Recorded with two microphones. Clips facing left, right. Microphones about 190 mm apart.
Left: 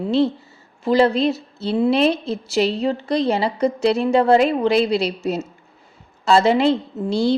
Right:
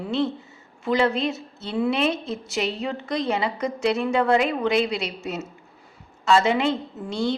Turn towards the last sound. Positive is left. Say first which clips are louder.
# left 7 dB
turn(degrees=35)  # may be behind; listen again after turning